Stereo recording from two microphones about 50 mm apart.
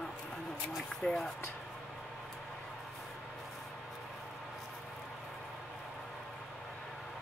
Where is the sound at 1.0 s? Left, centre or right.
Centre.